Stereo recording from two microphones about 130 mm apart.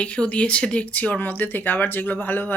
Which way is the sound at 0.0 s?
10° left (ahead or behind).